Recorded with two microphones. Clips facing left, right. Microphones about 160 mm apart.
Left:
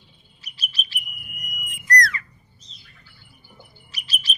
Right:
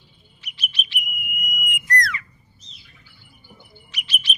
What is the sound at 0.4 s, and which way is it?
Bird, 35° left (ahead or behind).